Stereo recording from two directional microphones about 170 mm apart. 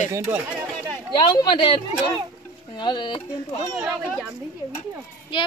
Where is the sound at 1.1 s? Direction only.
25° left (ahead or behind).